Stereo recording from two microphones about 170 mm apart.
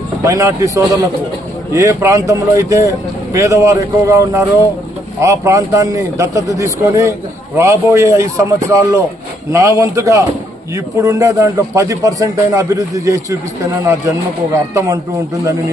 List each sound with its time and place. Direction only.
0.2 s a man's voice: 15° right (ahead or behind)